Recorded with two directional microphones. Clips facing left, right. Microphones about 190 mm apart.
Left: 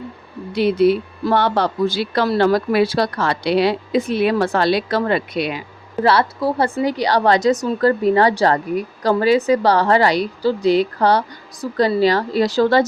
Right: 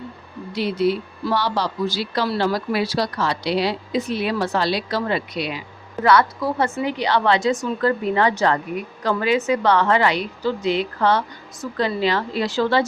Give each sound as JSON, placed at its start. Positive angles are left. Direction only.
{"t": 0.5, "sound": "speech", "side_deg": 55}
{"t": 6.0, "sound": "a woman's voice", "side_deg": 30}